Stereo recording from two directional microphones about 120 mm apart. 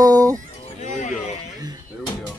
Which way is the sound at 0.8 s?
90° left.